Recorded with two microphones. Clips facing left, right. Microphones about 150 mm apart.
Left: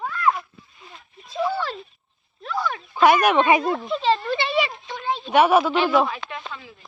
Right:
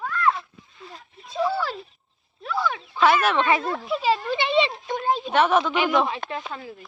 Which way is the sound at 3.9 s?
5° right (ahead or behind).